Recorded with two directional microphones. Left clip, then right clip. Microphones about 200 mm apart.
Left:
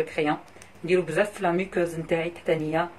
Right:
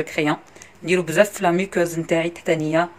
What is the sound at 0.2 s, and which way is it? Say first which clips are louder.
Speech: right 4 dB; 60° right (ahead or behind).